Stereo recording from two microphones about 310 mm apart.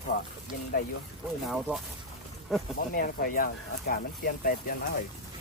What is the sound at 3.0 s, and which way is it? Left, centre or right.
Speech, left.